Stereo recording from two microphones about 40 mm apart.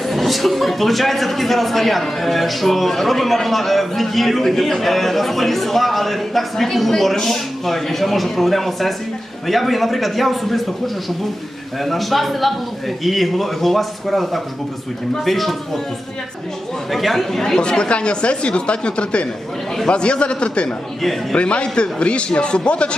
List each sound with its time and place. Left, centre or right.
0.1 s a man's voice: centre
11.8 s a man's voice: centre
16.9 s a man's voice: centre
17.4 s speech: centre
20.7 s speech: centre
21.3 s speech: left